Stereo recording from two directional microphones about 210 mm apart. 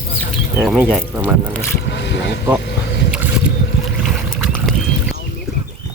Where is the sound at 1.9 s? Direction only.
55° left (ahead or behind).